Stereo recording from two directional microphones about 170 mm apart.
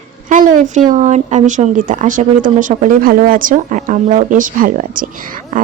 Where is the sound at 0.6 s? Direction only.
45° right (ahead or behind).